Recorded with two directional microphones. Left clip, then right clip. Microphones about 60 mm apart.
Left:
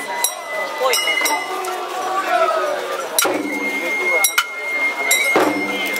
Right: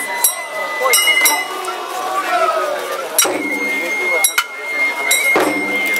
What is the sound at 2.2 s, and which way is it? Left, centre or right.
Run, right.